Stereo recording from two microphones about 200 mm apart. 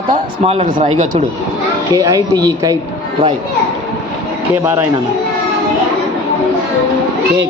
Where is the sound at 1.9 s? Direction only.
20° right (ahead or behind).